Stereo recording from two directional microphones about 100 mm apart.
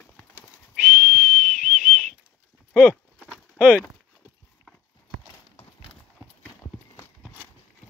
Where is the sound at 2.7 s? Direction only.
10° left (ahead or behind).